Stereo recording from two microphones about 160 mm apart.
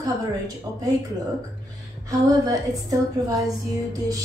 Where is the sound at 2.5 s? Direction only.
20° right (ahead or behind).